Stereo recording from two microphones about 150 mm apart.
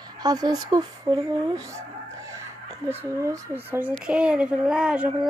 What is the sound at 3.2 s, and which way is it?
Speech, 20° right (ahead or behind).